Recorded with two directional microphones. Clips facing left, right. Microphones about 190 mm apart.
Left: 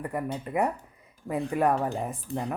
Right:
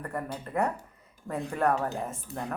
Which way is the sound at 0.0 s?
15° left (ahead or behind).